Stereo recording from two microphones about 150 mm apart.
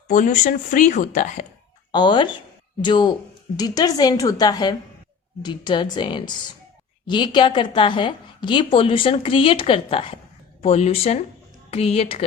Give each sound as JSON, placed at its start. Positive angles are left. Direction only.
{"t": 0.1, "sound": "speech", "side_deg": 55}
{"t": 1.9, "sound": "a woman's voice", "side_deg": 30}